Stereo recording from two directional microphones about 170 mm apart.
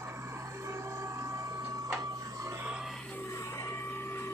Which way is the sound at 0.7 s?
15° right (ahead or behind).